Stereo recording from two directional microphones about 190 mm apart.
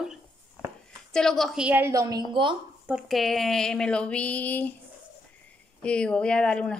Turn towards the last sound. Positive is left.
turn(degrees=5)  # may be behind; listen again after turning